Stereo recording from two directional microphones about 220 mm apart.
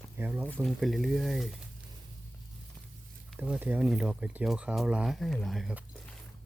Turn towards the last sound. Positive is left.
turn(degrees=0)  # may be behind; listen again after turning